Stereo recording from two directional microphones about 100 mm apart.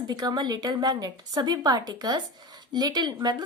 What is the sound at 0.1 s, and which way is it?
A woman's voice, 45° right (ahead or behind).